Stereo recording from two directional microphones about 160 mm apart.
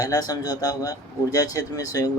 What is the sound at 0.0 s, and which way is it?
Speech, 25° left (ahead or behind).